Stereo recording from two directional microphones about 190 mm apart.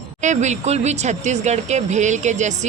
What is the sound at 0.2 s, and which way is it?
A woman's voice, 40° right (ahead or behind).